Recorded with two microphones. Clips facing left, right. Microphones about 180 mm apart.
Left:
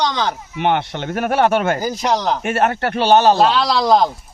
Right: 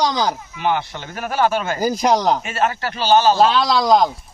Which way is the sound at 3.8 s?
15° right (ahead or behind).